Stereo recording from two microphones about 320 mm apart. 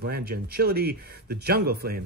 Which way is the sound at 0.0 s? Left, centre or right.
Right.